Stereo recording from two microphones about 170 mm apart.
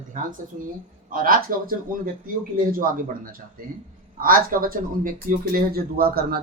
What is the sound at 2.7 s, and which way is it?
Speech, 55° right (ahead or behind).